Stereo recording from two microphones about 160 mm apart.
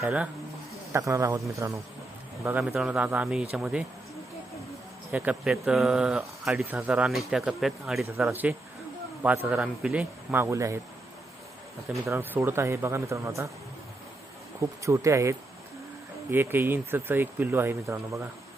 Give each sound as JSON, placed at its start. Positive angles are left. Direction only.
{"t": 0.0, "sound": "speech", "side_deg": -5}
{"t": 0.9, "sound": "a man's voice", "side_deg": -20}
{"t": 5.1, "sound": "speech", "side_deg": -10}
{"t": 12.0, "sound": "speech", "side_deg": -15}
{"t": 14.6, "sound": "a man's voice", "side_deg": -20}